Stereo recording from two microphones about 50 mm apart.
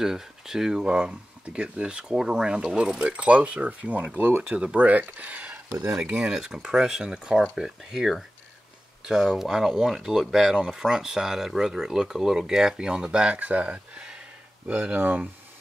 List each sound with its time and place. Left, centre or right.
0.0 s speech: centre; by 5.6 s right
5.9 s speech: centre
13.4 s speech: right
14.7 s speech: right